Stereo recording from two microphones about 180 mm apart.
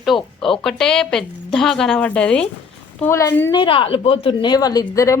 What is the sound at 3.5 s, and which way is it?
Speech, 30° left (ahead or behind).